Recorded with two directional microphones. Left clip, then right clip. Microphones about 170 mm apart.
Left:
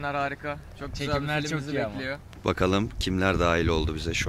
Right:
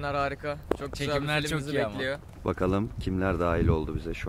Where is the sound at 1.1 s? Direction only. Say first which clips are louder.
Even; 10° left (ahead or behind).